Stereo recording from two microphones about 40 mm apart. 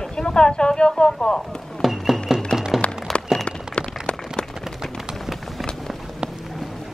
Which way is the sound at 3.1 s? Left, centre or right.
Centre.